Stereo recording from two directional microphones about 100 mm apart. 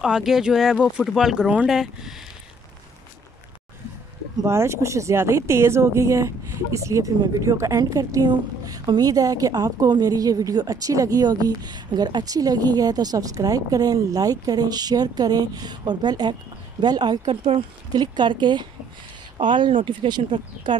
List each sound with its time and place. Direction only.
0.0 s speech: 5° right (ahead or behind)
4.4 s a woman's voice: 25° right (ahead or behind); by 17.3 s 45° right (ahead or behind)
17.3 s speech: 65° right (ahead or behind)
17.9 s speech: 45° right (ahead or behind)